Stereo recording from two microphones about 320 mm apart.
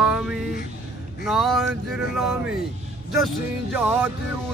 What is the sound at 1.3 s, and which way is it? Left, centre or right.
Male singing, centre.